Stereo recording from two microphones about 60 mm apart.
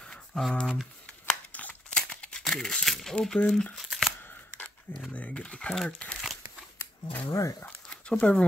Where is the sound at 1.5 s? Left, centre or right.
Left.